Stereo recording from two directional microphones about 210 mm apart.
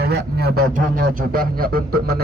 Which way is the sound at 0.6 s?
40° right (ahead or behind).